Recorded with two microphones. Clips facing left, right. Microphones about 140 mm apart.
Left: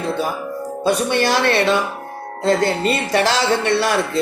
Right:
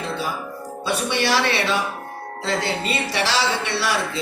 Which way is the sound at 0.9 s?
50° left (ahead or behind).